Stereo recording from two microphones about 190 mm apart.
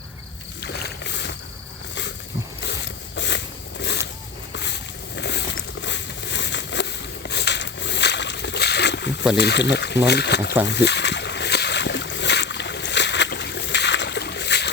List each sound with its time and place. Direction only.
0.6 s boat: 65° left (ahead or behind)
3.2 s a sound: 70° left (ahead or behind)
9.3 s speech: 65° left (ahead or behind)
10.7 s boat: 65° left (ahead or behind)